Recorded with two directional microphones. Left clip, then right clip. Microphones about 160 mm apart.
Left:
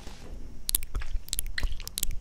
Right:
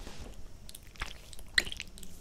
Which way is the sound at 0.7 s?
55° left (ahead or behind).